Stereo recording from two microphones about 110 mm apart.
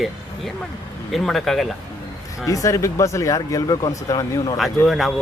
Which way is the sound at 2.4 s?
30° left (ahead or behind).